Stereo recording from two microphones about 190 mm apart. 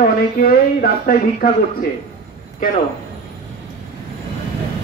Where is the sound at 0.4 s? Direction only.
50° left (ahead or behind).